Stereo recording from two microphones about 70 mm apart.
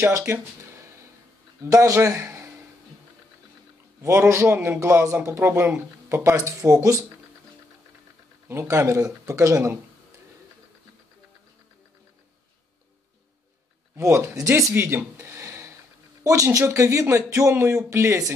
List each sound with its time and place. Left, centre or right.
0.3 s speech: right
4.0 s speech: right
8.5 s speech: right
13.9 s speech: right
14.7 s a sound: right
16.3 s speech: right